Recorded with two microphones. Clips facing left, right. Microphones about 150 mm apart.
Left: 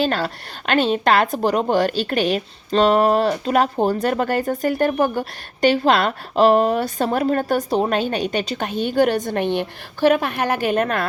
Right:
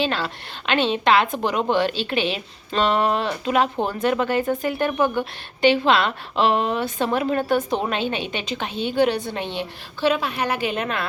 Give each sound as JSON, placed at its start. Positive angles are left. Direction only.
{"t": 0.0, "sound": "speech", "side_deg": 45}